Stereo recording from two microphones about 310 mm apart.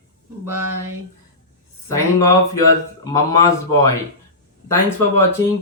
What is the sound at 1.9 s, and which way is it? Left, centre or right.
Speech, centre.